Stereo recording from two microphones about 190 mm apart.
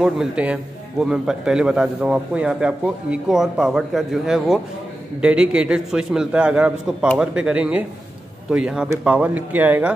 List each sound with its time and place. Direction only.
0.0 s a man's voice: 5° right (ahead or behind)